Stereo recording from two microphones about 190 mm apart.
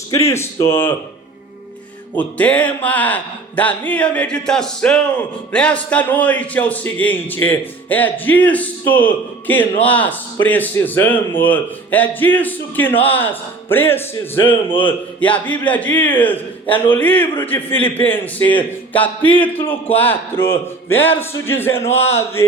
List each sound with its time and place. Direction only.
0.1 s a man's voice: 15° left (ahead or behind)
2.1 s a man's voice: 5° left (ahead or behind)
14.4 s a man's voice: 25° left (ahead or behind)
14.8 s a man's voice: 10° left (ahead or behind)